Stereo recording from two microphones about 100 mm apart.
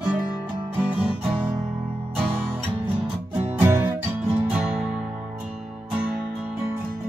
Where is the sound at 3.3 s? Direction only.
25° right (ahead or behind).